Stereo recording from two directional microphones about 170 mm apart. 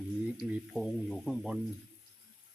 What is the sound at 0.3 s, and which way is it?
Speech, 5° right (ahead or behind).